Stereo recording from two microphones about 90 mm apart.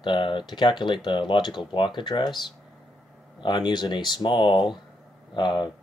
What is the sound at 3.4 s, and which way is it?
Speech, 55° left (ahead or behind).